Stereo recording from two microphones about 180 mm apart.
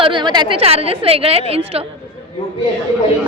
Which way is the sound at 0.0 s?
25° right (ahead or behind).